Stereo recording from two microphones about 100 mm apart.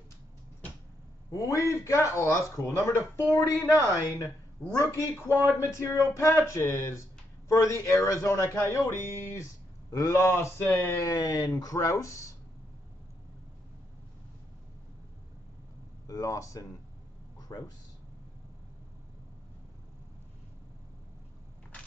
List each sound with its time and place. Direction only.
1.3 s speech: 35° left (ahead or behind)
11.1 s speech: 35° left (ahead or behind)
16.1 s speech: 35° left (ahead or behind)
17.4 s a sound: 35° left (ahead or behind)